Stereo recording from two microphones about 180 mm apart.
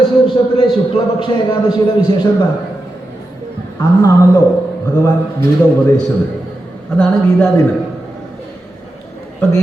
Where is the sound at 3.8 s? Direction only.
20° left (ahead or behind).